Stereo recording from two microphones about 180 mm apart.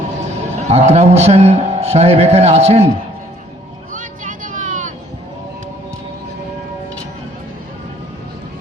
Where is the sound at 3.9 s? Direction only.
45° right (ahead or behind).